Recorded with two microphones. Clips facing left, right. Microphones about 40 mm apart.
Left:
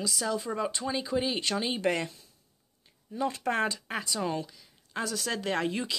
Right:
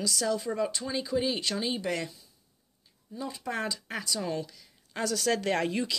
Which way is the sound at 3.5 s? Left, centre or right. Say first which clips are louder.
Left 4 dB; left.